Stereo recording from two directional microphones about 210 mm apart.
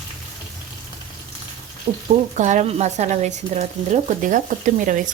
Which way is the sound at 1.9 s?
30° right (ahead or behind).